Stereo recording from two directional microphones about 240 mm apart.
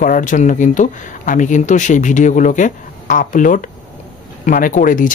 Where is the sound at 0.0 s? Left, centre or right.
Left.